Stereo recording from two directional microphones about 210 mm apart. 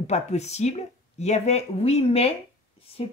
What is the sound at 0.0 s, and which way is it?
Speech, 30° left (ahead or behind).